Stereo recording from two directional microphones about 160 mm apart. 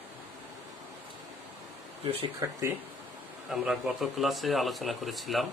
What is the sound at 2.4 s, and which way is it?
Speech, 20° right (ahead or behind).